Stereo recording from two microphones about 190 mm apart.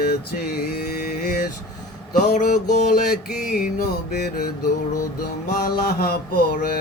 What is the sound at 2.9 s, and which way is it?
Music, 55° left (ahead or behind).